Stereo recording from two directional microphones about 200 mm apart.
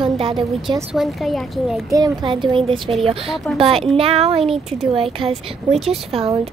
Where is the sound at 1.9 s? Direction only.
20° right (ahead or behind).